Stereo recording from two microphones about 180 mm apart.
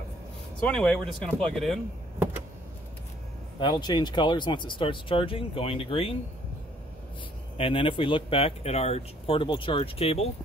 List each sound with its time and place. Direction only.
0.6 s speech: 5° left (ahead or behind)
3.5 s speech: 25° left (ahead or behind)
7.5 s speech: 30° left (ahead or behind)